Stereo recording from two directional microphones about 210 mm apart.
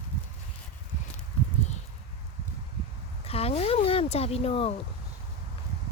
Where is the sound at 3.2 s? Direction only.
30° left (ahead or behind).